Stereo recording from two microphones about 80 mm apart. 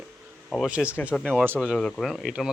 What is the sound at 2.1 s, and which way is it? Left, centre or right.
Speech, centre.